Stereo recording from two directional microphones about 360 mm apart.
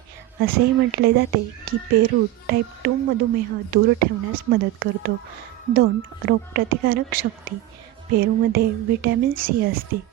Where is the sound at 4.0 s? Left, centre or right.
Right.